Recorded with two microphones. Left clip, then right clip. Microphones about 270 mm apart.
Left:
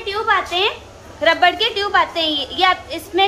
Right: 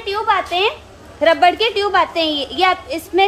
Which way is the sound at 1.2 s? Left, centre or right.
Right.